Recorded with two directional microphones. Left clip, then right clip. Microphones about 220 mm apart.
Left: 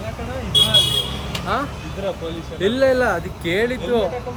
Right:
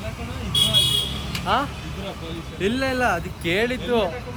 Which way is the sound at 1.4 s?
Centre (ahead or behind).